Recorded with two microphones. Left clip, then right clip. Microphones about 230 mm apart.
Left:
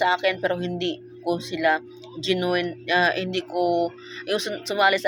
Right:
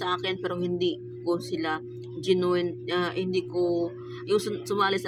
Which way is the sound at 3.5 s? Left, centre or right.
Left.